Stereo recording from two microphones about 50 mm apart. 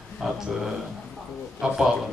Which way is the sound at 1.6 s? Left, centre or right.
Centre.